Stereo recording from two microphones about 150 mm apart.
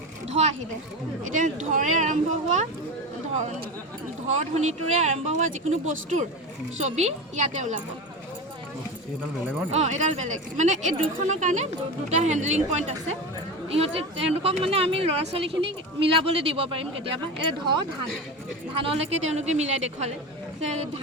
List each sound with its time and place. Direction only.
0.3 s a sound: 45° right (ahead or behind)
1.2 s speech: 55° right (ahead or behind)
4.3 s speech: 50° right (ahead or behind)
9.7 s speech: 50° right (ahead or behind)
13.7 s speech: 40° right (ahead or behind)
18.8 s speech: 45° right (ahead or behind)